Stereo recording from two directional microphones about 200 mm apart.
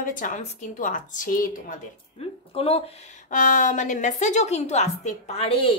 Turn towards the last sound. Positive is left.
turn(degrees=25)  # may be behind; listen again after turning